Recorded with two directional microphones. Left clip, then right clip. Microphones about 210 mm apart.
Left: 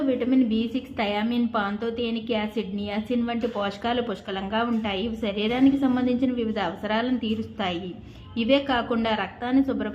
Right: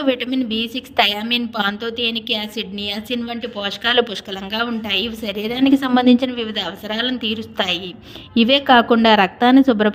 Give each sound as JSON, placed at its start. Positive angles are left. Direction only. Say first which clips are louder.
{"t": 0.0, "sound": "a woman's voice", "louder": "right 4 dB", "side_deg": -45}